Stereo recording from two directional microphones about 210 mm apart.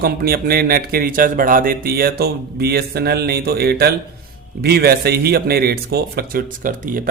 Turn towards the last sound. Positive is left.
turn(degrees=-40)  # may be behind; listen again after turning